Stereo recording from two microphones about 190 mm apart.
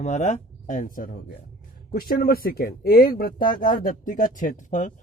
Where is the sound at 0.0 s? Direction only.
35° left (ahead or behind).